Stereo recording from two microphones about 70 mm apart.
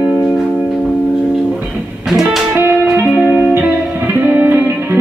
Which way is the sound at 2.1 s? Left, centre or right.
Centre.